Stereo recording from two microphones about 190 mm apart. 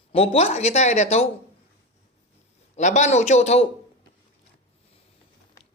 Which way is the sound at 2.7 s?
40° left (ahead or behind).